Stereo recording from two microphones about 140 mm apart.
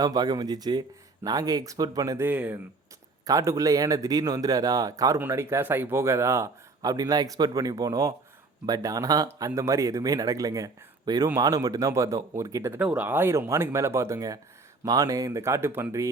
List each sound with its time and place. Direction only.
0.0 s speech: 25° right (ahead or behind)
3.2 s speech: 25° right (ahead or behind)